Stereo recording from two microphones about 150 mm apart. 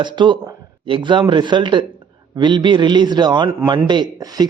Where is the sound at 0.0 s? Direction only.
30° right (ahead or behind).